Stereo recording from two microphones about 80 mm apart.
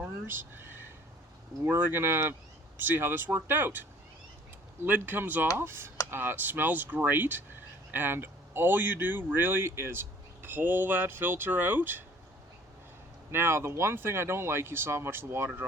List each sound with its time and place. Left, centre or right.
0.3 s speech: right
13.3 s speech: right